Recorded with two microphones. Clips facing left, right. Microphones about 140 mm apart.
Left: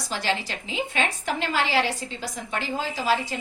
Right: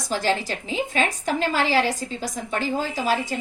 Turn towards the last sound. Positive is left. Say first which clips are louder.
# right 1 dB
turn(degrees=-45)  # may be behind; listen again after turning